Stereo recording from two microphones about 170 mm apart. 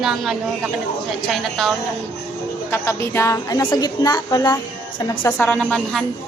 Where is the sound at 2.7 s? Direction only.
15° left (ahead or behind).